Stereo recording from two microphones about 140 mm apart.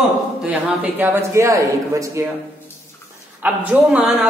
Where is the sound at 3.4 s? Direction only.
10° right (ahead or behind).